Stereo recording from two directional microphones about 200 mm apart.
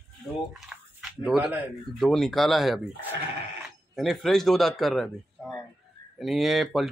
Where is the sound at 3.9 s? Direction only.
Centre (ahead or behind).